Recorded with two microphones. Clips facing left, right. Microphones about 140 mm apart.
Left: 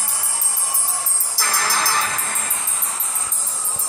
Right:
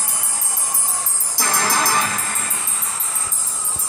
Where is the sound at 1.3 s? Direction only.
20° right (ahead or behind).